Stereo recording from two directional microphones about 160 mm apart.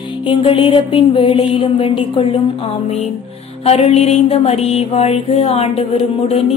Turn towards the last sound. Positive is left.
turn(degrees=40)  # may be behind; listen again after turning